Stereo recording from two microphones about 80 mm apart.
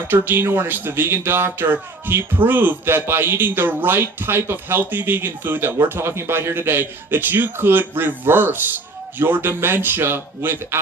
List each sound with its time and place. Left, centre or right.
0.1 s speech: right